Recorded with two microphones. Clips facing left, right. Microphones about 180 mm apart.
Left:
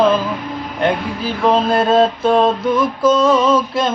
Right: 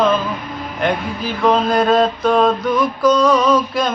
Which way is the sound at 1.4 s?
30° left (ahead or behind).